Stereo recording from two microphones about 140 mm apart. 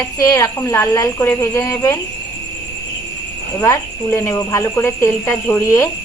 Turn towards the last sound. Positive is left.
turn(degrees=15)  # may be behind; listen again after turning